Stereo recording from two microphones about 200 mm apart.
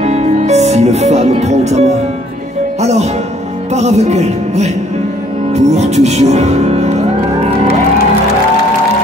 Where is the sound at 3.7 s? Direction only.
35° right (ahead or behind).